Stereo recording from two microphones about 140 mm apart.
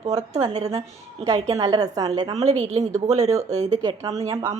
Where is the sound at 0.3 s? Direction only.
55° right (ahead or behind).